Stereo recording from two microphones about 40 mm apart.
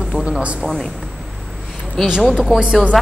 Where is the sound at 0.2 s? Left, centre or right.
Right.